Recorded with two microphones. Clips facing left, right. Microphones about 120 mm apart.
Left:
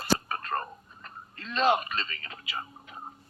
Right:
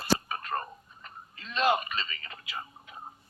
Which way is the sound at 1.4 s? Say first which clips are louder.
Left 2 dB; 50° left (ahead or behind).